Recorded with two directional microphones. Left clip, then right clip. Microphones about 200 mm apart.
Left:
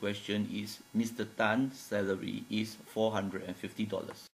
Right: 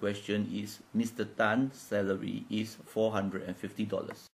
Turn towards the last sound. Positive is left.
turn(degrees=-15)  # may be behind; listen again after turning